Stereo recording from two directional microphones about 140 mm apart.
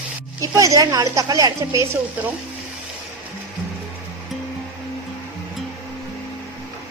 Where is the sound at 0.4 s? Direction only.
25° right (ahead or behind).